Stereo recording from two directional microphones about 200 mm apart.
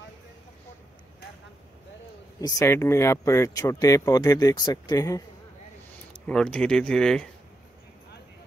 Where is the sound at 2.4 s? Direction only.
10° left (ahead or behind).